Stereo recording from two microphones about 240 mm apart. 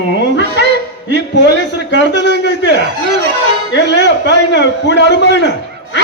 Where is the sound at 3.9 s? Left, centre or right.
Left.